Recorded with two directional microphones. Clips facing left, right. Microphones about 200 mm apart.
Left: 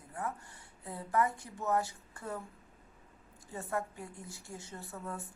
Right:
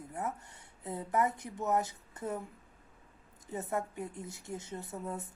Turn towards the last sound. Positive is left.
turn(degrees=-20)  # may be behind; listen again after turning